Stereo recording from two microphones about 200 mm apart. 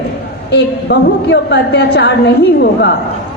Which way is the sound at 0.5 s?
60° left (ahead or behind).